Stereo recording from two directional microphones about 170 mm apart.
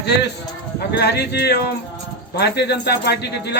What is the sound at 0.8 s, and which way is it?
Speech, 75° left (ahead or behind).